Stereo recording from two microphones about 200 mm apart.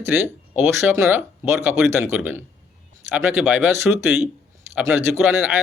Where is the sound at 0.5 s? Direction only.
10° right (ahead or behind).